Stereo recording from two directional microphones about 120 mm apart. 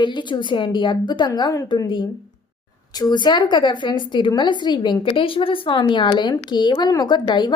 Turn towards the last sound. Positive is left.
turn(degrees=40)  # may be behind; listen again after turning